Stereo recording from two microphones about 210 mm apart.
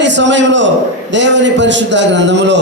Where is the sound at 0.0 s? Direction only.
60° right (ahead or behind).